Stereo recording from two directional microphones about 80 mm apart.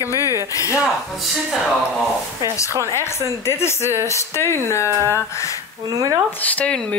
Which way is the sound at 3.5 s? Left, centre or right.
Left.